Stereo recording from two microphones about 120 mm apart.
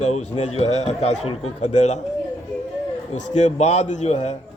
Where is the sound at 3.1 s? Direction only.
75° left (ahead or behind).